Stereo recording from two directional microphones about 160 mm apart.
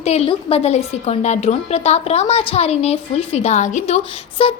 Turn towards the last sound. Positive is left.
turn(degrees=40)  # may be behind; listen again after turning